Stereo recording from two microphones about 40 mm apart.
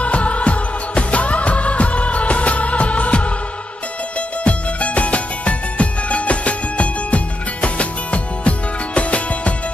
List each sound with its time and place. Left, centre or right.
0.0 s music: left
4.5 s music: left